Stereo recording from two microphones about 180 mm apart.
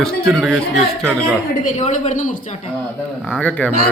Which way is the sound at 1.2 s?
40° left (ahead or behind).